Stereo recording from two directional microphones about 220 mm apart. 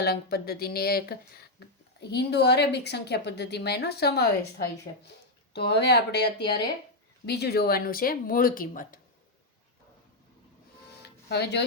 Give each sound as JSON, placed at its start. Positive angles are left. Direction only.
{"t": 0.0, "sound": "speech", "side_deg": 45}
{"t": 11.0, "sound": "music", "side_deg": 50}